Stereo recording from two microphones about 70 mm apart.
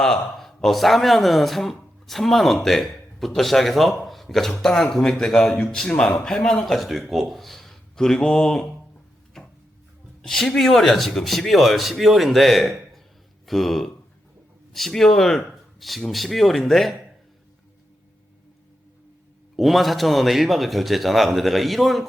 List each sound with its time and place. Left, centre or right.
0.0 s speech: centre
5.9 s a man's voice: centre
6.1 s speech: centre
9.4 s a sound: centre
10.2 s speech: centre
19.5 s speech: centre